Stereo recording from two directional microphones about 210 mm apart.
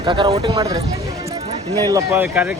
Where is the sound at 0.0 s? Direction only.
25° right (ahead or behind).